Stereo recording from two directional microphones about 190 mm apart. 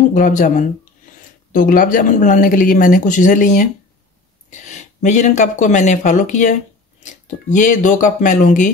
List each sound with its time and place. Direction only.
0.1 s speech: 40° left (ahead or behind)